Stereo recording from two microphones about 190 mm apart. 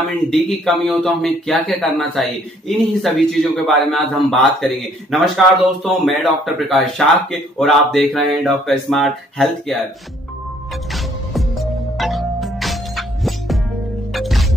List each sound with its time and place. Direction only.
0.0 s a man's voice: 5° left (ahead or behind)
10.9 s music: centre (ahead or behind)